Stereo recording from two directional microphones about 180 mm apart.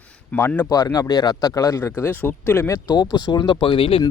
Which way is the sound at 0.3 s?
10° left (ahead or behind).